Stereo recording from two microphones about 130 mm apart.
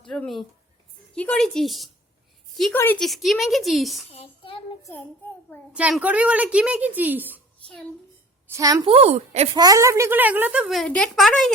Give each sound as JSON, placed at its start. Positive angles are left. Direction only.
{"t": 0.0, "sound": "a woman's voice", "side_deg": 5}
{"t": 2.7, "sound": "speech", "side_deg": 15}
{"t": 3.0, "sound": "a woman's voice", "side_deg": 0}
{"t": 4.1, "sound": "child singing", "side_deg": 45}
{"t": 5.7, "sound": "a woman's voice", "side_deg": -10}
{"t": 8.4, "sound": "a woman's voice", "side_deg": -25}
{"t": 8.8, "sound": "a woman's voice", "side_deg": -50}
{"t": 9.5, "sound": "a woman's voice", "side_deg": -30}
{"t": 10.7, "sound": "a woman's voice", "side_deg": 5}